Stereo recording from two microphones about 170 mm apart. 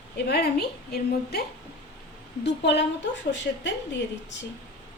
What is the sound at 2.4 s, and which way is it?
A woman's voice, 85° left.